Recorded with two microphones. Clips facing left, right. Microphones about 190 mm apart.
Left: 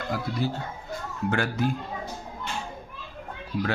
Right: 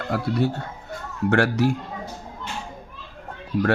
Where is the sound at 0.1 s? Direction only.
65° right (ahead or behind).